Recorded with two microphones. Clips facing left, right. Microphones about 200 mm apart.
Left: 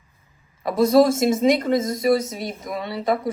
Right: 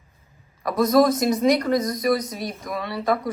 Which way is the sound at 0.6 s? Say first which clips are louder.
Left 2 dB; 25° left (ahead or behind).